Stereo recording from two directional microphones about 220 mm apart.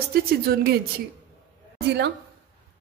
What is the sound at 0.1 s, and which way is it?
Speech, 45° right (ahead or behind).